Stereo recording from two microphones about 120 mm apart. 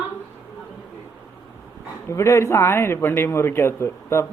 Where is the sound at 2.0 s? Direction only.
25° left (ahead or behind).